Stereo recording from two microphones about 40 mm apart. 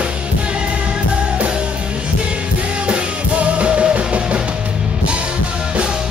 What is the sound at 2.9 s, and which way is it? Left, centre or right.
Music, right.